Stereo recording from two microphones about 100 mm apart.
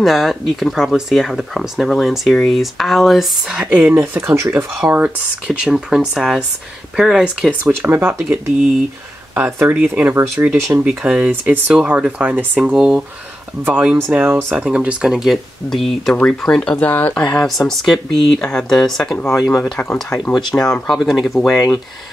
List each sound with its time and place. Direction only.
0.0 s speech: centre (ahead or behind)
3.6 s speech: 15° right (ahead or behind)
7.8 s speech: 20° right (ahead or behind)
9.9 s speech: 20° right (ahead or behind); by 21.5 s centre (ahead or behind)